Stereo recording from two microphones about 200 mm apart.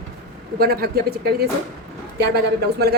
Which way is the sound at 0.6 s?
50° right (ahead or behind).